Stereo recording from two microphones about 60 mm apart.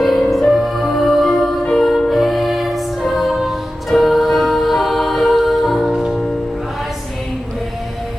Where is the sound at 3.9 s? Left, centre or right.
Centre.